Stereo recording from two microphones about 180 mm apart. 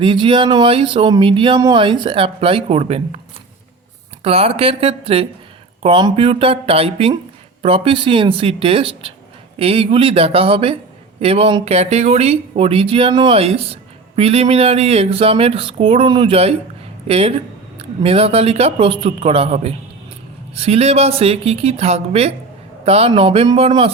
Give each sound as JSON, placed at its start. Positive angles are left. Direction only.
{"t": 0.0, "sound": "speech", "side_deg": -25}
{"t": 4.2, "sound": "speech", "side_deg": -35}